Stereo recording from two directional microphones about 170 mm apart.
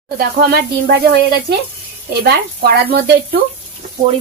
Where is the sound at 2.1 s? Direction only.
70° right (ahead or behind).